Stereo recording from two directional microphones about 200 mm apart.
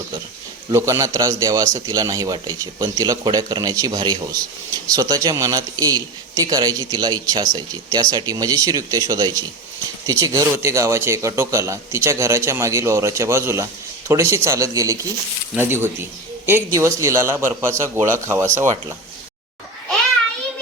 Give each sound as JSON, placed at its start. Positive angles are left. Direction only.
{"t": 0.7, "sound": "a man's voice", "side_deg": -15}